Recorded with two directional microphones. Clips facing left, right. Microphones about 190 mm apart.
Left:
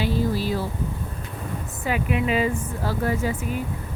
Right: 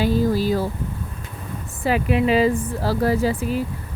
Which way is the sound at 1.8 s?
35° right (ahead or behind).